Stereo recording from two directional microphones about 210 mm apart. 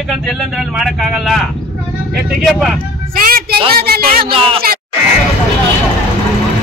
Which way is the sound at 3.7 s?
45° right (ahead or behind).